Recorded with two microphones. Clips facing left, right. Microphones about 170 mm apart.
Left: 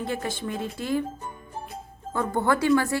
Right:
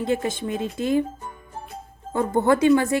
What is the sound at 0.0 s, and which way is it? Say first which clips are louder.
A woman's voice: right 5 dB; 20° right (ahead or behind).